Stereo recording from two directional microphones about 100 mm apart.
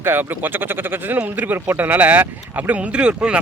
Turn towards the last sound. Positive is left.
turn(degrees=-10)  # may be behind; listen again after turning